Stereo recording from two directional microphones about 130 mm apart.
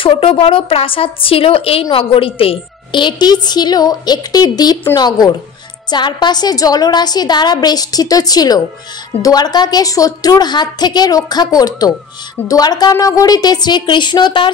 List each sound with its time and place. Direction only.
0.0 s a woman's voice: 45° left (ahead or behind)